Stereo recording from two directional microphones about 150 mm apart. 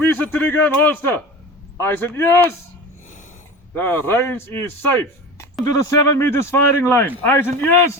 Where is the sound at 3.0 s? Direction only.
55° left (ahead or behind).